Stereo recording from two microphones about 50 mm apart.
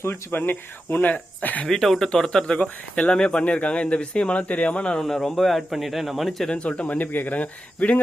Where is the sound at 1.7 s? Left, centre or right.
Centre.